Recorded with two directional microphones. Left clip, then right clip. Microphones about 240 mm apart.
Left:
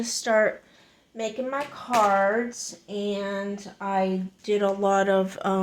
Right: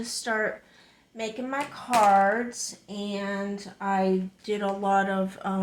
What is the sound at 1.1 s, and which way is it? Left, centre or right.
Speech, left.